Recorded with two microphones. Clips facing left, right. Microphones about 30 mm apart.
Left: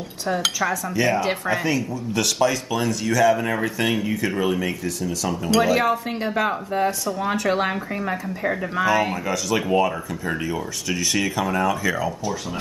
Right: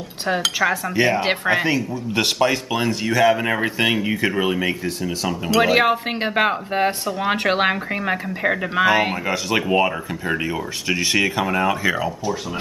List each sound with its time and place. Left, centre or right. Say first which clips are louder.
0.6 s speech: right 4 dB; right
1.7 s speech: right 2 dB; right